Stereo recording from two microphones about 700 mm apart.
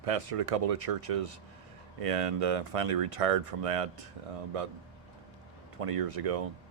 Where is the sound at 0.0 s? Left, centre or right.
Right.